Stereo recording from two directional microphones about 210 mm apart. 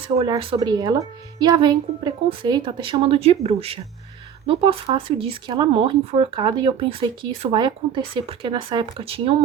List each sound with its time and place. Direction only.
0.2 s speech: 25° right (ahead or behind)